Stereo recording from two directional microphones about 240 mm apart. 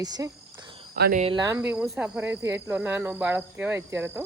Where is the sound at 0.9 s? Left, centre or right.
Right.